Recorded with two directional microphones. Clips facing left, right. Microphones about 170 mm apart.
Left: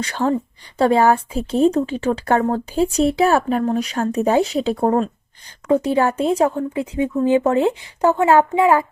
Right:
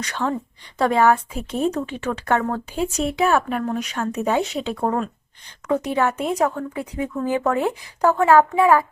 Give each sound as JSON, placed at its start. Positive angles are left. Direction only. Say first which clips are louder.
{"t": 0.0, "sound": "a woman's voice", "louder": "left 5 dB", "side_deg": 35}